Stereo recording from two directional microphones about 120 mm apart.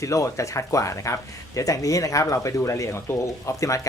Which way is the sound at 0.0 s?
25° left (ahead or behind).